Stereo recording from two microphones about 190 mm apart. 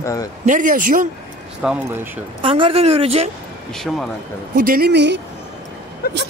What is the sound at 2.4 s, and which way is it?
Speech, 30° right (ahead or behind).